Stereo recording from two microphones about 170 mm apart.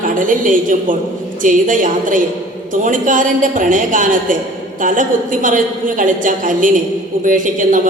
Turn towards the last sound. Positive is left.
turn(degrees=-50)  # may be behind; listen again after turning